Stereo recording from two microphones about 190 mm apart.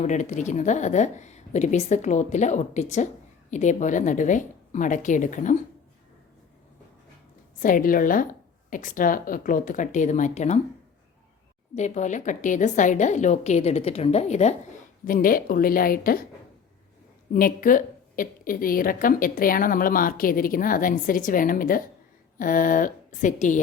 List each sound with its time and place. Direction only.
0.0 s a woman's voice: 40° left (ahead or behind)
7.6 s a woman's voice: 45° left (ahead or behind)
11.7 s a woman's voice: 40° left (ahead or behind)
15.0 s a woman's voice: 45° left (ahead or behind)
17.3 s a woman's voice: 45° left (ahead or behind)